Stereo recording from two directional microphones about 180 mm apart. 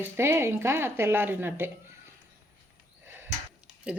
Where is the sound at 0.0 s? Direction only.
15° right (ahead or behind).